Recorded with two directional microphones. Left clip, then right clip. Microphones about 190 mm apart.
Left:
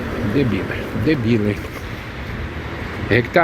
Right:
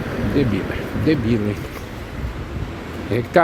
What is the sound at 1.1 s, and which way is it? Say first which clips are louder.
Speech: left 1 dB; centre (ahead or behind).